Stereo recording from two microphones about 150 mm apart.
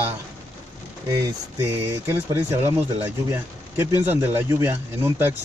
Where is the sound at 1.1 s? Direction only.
20° right (ahead or behind).